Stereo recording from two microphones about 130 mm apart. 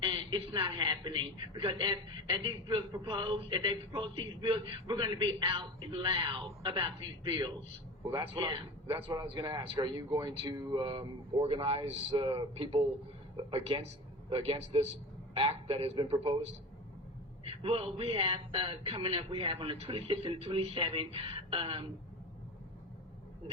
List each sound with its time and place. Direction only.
0.0 s a woman's voice: 40° right (ahead or behind)
8.2 s a woman's voice: 40° right (ahead or behind)
12.1 s a woman's voice: 35° right (ahead or behind)